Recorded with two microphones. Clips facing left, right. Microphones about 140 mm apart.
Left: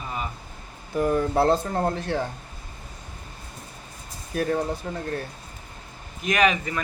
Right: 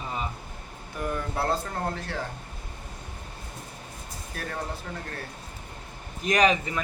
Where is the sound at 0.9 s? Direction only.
30° left (ahead or behind).